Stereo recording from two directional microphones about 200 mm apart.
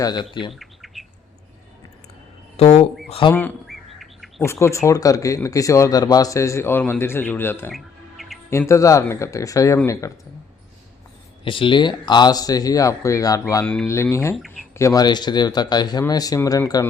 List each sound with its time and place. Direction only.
0.0 s speech: 20° left (ahead or behind)
0.6 s bird: centre (ahead or behind)
2.6 s speech: 35° left (ahead or behind)
3.3 s bird: 5° left (ahead or behind)
4.4 s speech: 15° left (ahead or behind)
7.7 s music: centre (ahead or behind)
8.4 s speech: 15° left (ahead or behind)
11.4 s speech: 25° left (ahead or behind)
14.3 s speech: centre (ahead or behind)
14.7 s speech: 15° left (ahead or behind)